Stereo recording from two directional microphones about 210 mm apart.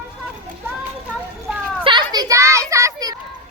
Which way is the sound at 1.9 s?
20° right (ahead or behind).